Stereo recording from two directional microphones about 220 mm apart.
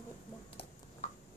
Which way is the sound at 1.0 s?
30° left (ahead or behind).